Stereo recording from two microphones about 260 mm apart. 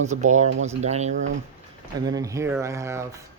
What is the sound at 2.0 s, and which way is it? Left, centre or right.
Speech, centre.